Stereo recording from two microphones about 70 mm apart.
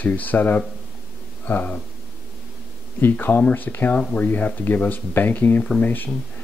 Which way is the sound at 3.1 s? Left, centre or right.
Left.